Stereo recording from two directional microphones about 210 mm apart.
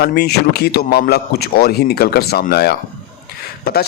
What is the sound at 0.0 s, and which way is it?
A man's voice, 50° left (ahead or behind).